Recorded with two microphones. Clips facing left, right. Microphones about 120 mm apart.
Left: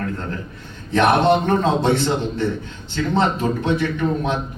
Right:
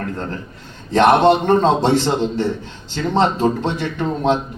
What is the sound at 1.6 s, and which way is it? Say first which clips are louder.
A man's voice: right 3 dB; 30° right (ahead or behind).